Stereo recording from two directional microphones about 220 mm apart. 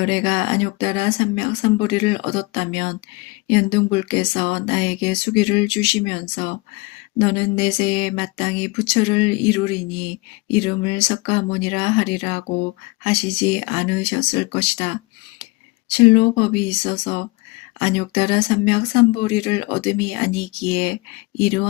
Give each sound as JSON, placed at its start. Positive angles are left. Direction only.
{"t": 0.0, "sound": "speech", "side_deg": 25}
{"t": 13.6, "sound": "speech", "side_deg": 25}